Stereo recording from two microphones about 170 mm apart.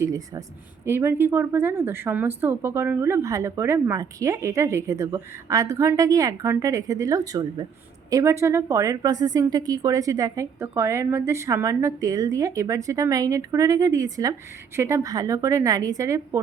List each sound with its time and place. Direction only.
0.0 s a woman's voice: 20° right (ahead or behind)